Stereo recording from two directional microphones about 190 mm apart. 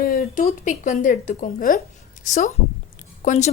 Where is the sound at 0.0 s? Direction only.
50° left (ahead or behind).